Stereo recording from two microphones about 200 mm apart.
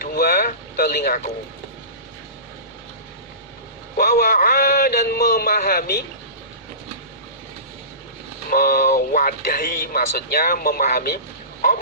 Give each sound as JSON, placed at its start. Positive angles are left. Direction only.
{"t": 0.0, "sound": "boat", "side_deg": 50}
{"t": 3.9, "sound": "speech", "side_deg": 45}
{"t": 8.4, "sound": "speech", "side_deg": 45}